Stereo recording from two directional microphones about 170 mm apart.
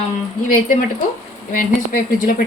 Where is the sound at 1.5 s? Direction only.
55° left (ahead or behind).